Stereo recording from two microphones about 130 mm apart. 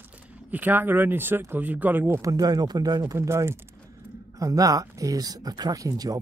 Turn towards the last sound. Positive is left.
turn(degrees=-30)  # may be behind; listen again after turning